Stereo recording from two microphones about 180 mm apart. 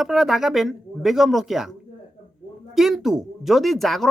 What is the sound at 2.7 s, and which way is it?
Speech, centre (ahead or behind).